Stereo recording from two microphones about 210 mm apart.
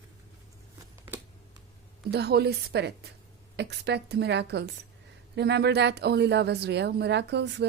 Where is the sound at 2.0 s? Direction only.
50° right (ahead or behind).